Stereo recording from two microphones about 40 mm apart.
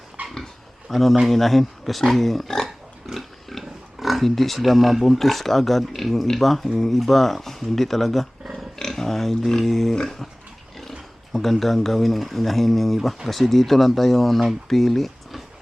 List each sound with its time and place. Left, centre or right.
0.2 s dog: right
0.9 s speech: centre
8.8 s pig: centre
9.5 s speech: centre
9.9 s speech: centre
11.3 s a sound: centre
11.6 s speech: centre
14.7 s a sound: centre